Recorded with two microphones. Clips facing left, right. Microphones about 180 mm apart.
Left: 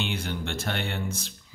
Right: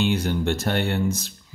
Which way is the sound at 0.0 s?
40° right (ahead or behind).